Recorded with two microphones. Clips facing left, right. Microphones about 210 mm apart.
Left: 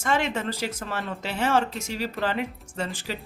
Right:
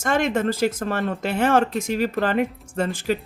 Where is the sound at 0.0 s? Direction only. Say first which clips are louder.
Right 5 dB; 50° right (ahead or behind).